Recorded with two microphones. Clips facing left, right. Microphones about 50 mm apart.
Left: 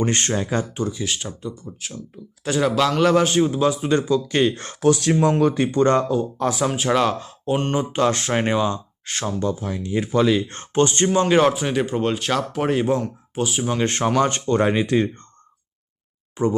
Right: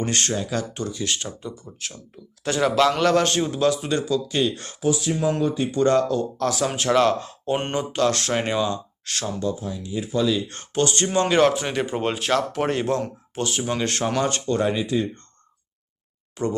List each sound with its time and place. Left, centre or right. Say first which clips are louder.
0.0 s speech: left 3 dB; left
0.7 s speech: left 2 dB; centre
3.9 s speech: left 4 dB; left
4.8 s speech: left 5 dB; left
5.4 s speech: left 3 dB; left
6.0 s speech: left 1 dB; centre
7.7 s speech: left 2 dB; centre
9.5 s speech: left 3 dB; left
10.5 s speech: left 4 dB; left
11.1 s speech: right 1 dB; centre
13.7 s speech: left 5 dB; left
16.4 s speech: left 4 dB; centre